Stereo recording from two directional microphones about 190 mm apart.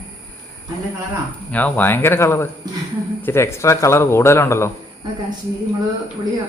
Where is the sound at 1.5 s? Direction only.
10° left (ahead or behind).